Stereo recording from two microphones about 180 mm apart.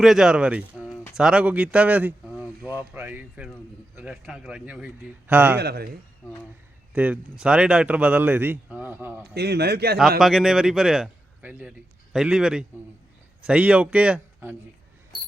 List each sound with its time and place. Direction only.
0.0 s a man's voice: centre (ahead or behind)
5.5 s a man's voice: 60° right (ahead or behind)
6.9 s a man's voice: 10° right (ahead or behind)
9.2 s a man's voice: 65° right (ahead or behind)
10.2 s a man's voice: centre (ahead or behind)